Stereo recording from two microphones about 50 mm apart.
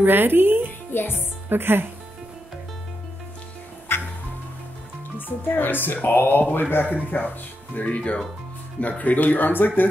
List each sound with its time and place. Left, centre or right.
0.0 s speech: right
0.9 s speech: left
1.5 s speech: right
3.9 s music: left
5.4 s speech: left